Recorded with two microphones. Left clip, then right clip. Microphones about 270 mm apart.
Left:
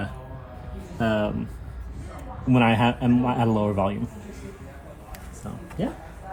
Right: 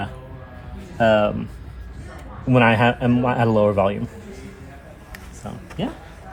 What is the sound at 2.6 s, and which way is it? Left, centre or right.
Speech, right.